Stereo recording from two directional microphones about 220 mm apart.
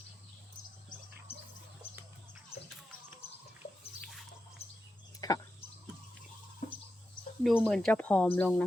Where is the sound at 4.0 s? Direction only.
Centre (ahead or behind).